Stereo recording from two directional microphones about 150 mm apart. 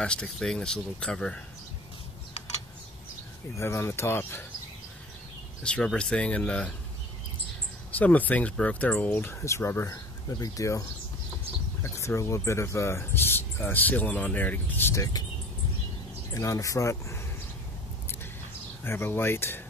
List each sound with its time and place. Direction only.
0.0 s speech: 5° left (ahead or behind)
3.5 s speech: 15° left (ahead or behind)
5.6 s speech: 5° left (ahead or behind)
7.9 s speech: 10° left (ahead or behind)
11.8 s speech: 20° left (ahead or behind)
16.3 s speech: 20° left (ahead or behind)
18.9 s speech: 15° left (ahead or behind)